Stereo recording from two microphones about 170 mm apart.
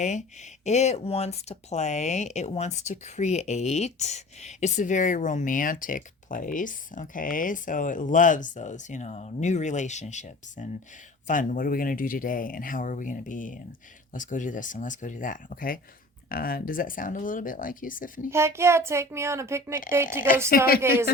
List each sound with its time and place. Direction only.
0.0 s speech: 45° left (ahead or behind)
18.3 s a woman's voice: 15° right (ahead or behind)
20.5 s speech: 60° left (ahead or behind)